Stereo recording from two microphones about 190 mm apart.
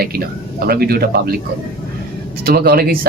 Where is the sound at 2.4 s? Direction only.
50° right (ahead or behind).